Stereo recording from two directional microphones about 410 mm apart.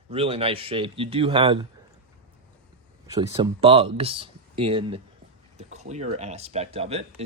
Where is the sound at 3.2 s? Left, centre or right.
Centre.